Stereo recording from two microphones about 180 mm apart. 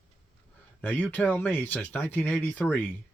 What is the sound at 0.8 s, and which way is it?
Speech, 10° left (ahead or behind).